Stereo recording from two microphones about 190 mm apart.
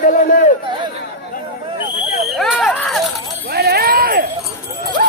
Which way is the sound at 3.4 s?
55° right (ahead or behind).